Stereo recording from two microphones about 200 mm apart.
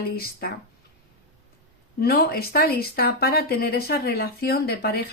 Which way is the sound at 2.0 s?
50° left (ahead or behind).